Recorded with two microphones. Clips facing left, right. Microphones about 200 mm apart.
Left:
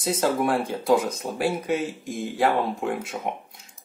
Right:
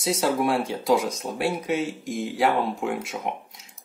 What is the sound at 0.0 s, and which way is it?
Speech, centre (ahead or behind).